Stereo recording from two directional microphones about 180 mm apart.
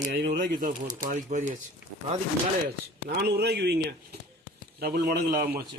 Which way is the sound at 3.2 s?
65° right (ahead or behind).